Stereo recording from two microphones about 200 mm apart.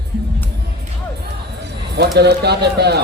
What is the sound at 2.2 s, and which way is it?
Speech, 55° right (ahead or behind).